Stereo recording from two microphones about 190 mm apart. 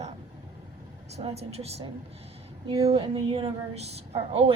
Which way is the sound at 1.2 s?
35° right (ahead or behind).